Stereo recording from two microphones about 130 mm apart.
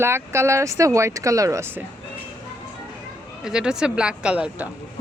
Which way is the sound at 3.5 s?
5° right (ahead or behind).